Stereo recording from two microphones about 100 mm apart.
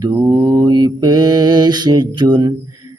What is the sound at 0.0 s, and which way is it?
Mantra, 40° right (ahead or behind).